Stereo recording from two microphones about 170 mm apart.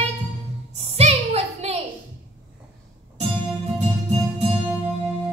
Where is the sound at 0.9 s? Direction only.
40° right (ahead or behind).